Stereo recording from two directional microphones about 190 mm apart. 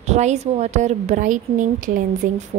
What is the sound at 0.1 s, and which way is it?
A woman's voice, 35° right (ahead or behind).